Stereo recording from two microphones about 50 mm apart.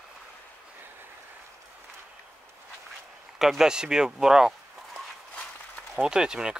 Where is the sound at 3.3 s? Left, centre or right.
Centre.